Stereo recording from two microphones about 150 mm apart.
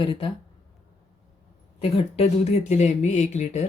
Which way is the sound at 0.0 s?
35° left (ahead or behind).